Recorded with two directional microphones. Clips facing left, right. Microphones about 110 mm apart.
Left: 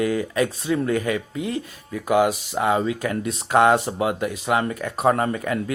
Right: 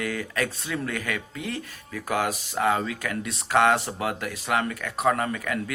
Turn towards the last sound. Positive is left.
turn(degrees=30)  # may be behind; listen again after turning